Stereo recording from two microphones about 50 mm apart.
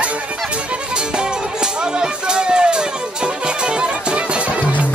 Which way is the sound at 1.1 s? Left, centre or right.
Centre.